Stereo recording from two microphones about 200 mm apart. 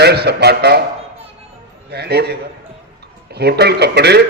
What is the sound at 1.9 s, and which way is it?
A man's voice, 55° right (ahead or behind).